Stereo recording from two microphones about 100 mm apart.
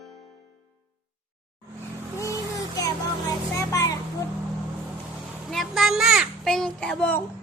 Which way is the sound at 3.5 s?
30° left (ahead or behind).